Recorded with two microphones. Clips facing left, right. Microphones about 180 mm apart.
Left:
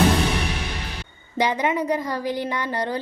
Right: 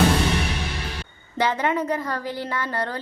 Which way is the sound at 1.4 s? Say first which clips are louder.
Left 1 dB; 15° left (ahead or behind).